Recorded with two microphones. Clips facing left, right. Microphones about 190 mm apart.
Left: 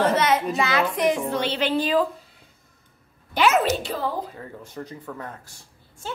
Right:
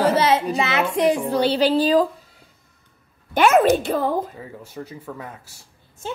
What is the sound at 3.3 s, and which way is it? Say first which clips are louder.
Speech: right 5 dB; 50° right (ahead or behind).